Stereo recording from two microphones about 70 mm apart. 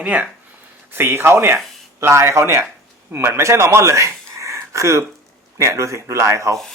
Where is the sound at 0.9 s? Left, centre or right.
Right.